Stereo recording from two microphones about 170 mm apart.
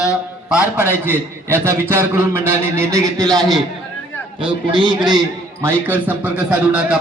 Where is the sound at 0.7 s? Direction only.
10° right (ahead or behind).